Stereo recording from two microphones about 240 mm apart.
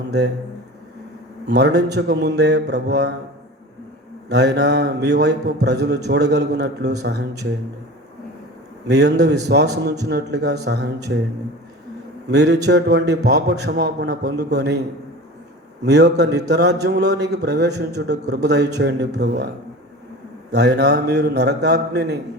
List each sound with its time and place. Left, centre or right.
1.5 s a man's voice: right
4.3 s a man's voice: right
8.9 s a man's voice: right
12.3 s a man's voice: right
15.8 s a man's voice: right
20.5 s a man's voice: right